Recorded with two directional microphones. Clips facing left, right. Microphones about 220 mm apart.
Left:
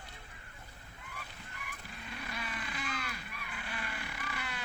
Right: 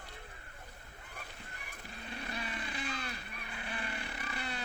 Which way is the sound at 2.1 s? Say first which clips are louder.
Right 1 dB; 35° right (ahead or behind).